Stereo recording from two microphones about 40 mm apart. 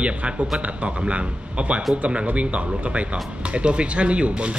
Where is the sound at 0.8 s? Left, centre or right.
Right.